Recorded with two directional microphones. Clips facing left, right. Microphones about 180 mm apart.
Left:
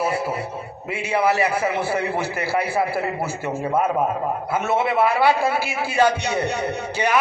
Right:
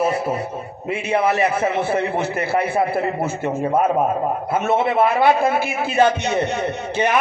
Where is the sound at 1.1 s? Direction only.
25° right (ahead or behind).